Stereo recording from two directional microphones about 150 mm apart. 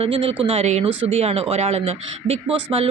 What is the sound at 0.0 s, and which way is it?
Speech, 40° right (ahead or behind).